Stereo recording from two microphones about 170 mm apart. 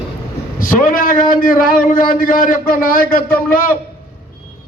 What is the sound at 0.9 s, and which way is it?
A man's voice, 55° left (ahead or behind).